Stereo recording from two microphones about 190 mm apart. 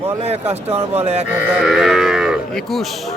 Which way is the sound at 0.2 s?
35° right (ahead or behind).